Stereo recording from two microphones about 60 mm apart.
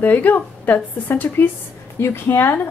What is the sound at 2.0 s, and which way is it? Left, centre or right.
Speech, left.